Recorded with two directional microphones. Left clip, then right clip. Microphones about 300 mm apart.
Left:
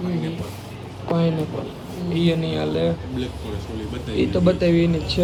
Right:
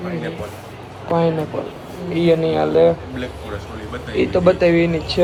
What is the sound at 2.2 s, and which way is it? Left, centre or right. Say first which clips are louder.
Speech: right 9 dB; centre.